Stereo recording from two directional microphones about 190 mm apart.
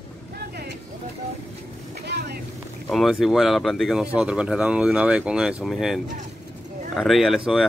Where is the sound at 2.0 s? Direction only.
55° right (ahead or behind).